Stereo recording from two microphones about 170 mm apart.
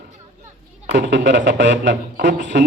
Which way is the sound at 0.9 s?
90° right.